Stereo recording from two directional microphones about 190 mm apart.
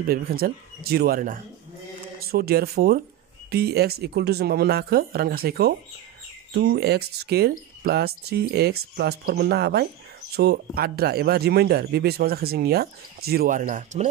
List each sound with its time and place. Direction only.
0.0 s speech: 50° right (ahead or behind)